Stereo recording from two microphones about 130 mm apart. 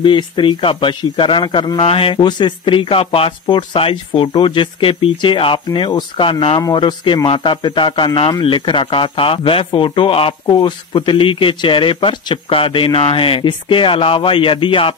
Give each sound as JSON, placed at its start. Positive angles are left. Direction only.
{"t": 0.0, "sound": "speech", "side_deg": 40}